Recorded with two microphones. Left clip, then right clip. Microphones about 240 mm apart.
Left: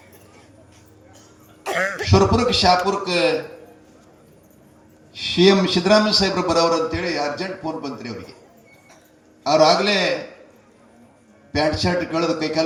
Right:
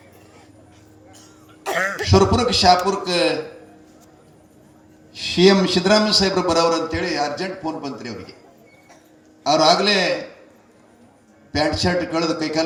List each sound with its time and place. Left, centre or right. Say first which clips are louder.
1.6 s a man's voice: right 1 dB; centre
5.1 s a man's voice: right 1 dB; right
9.4 s a man's voice: even; right
11.5 s a man's voice: even; right